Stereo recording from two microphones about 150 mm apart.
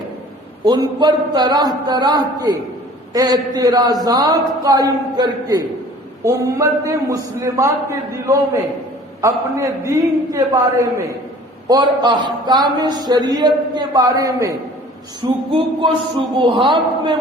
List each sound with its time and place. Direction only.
0.6 s speech: 25° right (ahead or behind)
15.2 s a man's voice: 35° right (ahead or behind)